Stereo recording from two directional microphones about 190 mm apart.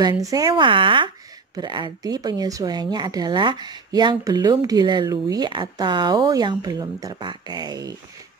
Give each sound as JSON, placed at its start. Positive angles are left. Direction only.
{"t": 0.2, "sound": "speech", "side_deg": -20}